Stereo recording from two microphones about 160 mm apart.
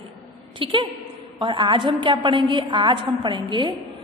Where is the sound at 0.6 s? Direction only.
30° right (ahead or behind).